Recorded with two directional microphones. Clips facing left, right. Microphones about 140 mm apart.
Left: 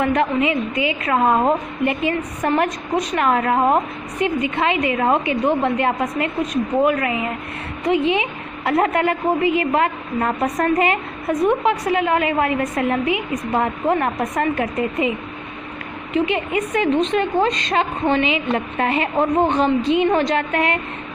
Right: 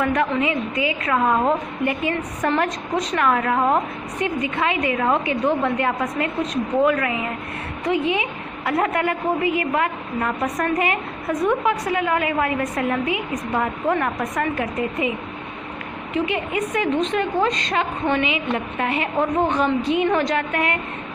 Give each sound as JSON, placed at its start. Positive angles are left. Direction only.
{"t": 0.0, "sound": "a woman's voice", "side_deg": 25}